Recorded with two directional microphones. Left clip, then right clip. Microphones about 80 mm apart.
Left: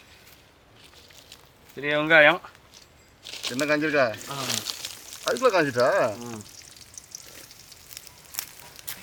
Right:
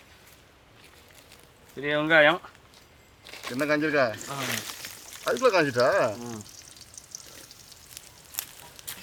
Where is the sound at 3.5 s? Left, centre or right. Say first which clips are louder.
Left 1 dB; centre.